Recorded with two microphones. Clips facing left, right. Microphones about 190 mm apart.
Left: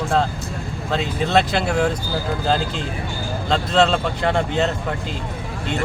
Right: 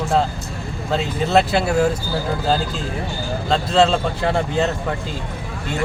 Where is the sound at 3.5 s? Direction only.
5° right (ahead or behind).